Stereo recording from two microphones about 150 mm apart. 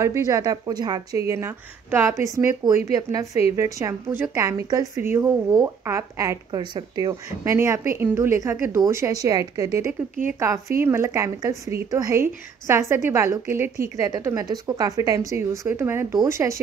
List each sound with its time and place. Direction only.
0.0 s a woman's voice: 20° right (ahead or behind)